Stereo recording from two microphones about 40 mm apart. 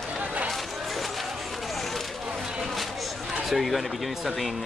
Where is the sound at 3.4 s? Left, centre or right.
Centre.